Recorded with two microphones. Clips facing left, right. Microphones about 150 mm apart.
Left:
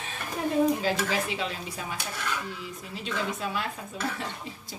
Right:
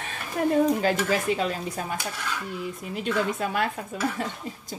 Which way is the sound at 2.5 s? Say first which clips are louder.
Right 7 dB; 55° right (ahead or behind).